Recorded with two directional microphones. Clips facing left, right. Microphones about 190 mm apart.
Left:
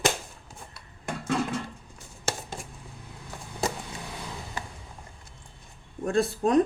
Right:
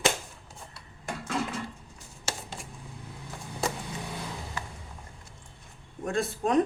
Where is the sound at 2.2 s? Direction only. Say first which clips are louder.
Left 4 dB; 45° left (ahead or behind).